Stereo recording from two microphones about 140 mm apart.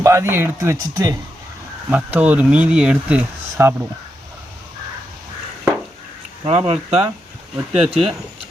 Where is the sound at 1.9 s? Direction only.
10° right (ahead or behind).